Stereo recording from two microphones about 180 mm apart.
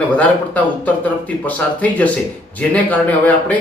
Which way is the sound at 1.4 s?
10° left (ahead or behind).